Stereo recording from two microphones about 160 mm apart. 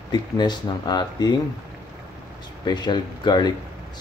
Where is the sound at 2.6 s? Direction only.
25° left (ahead or behind).